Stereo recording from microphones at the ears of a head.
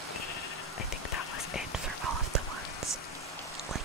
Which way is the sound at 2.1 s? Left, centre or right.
Right.